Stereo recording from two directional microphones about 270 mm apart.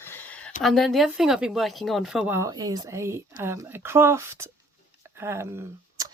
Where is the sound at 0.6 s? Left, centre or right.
Centre.